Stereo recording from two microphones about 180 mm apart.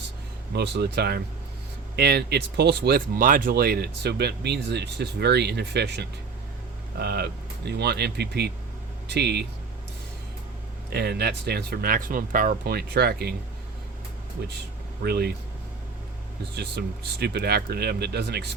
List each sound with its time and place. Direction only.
0.5 s speech: 65° right (ahead or behind)
10.8 s speech: 65° right (ahead or behind)
15.0 s speech: 65° right (ahead or behind)
16.6 s speech: 65° right (ahead or behind)